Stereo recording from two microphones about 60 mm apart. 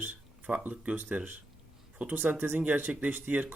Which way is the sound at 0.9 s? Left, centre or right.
Right.